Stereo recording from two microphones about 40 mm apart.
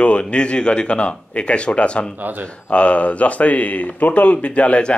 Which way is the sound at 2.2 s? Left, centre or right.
Right.